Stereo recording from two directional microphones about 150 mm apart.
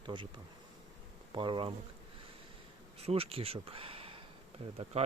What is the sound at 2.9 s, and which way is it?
Speech, 40° right (ahead or behind).